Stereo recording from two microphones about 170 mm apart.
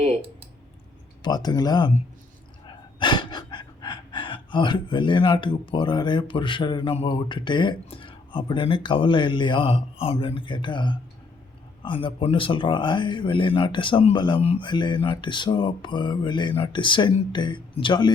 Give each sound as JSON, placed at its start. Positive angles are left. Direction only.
{"t": 0.0, "sound": "clicking", "side_deg": -35}
{"t": 1.2, "sound": "speech", "side_deg": 25}
{"t": 2.6, "sound": "gasp", "side_deg": 30}
{"t": 11.8, "sound": "speech", "side_deg": 30}